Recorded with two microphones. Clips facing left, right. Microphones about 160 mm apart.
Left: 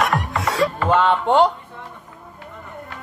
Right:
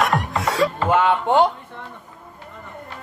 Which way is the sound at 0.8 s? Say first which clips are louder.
Left 1 dB; 15° right (ahead or behind).